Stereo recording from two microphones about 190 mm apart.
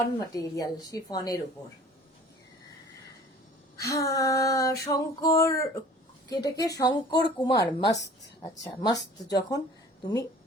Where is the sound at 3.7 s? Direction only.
15° left (ahead or behind).